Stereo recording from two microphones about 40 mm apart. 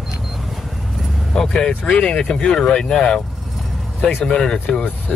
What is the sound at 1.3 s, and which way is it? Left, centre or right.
Speech, centre.